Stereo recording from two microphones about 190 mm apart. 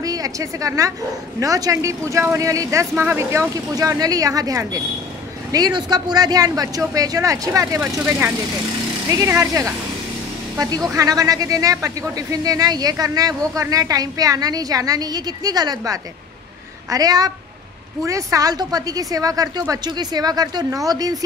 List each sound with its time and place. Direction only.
0.0 s a woman's voice: 20° right (ahead or behind)